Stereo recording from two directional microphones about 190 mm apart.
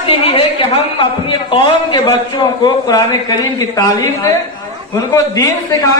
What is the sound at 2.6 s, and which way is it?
A man's voice, 20° left (ahead or behind).